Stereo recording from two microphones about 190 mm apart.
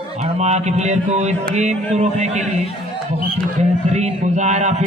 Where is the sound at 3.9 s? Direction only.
35° right (ahead or behind).